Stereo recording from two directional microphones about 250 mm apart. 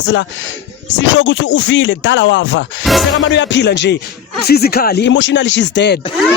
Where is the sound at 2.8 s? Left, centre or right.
Centre.